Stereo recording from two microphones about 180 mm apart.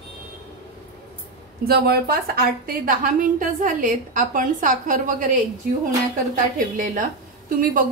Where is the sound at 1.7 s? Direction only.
60° right (ahead or behind).